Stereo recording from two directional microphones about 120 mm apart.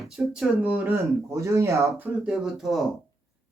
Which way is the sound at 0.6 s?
20° right (ahead or behind).